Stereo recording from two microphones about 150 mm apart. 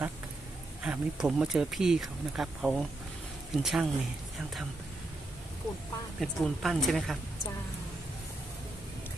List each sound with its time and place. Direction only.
0.8 s speech: 5° right (ahead or behind)
6.1 s speech: 5° left (ahead or behind)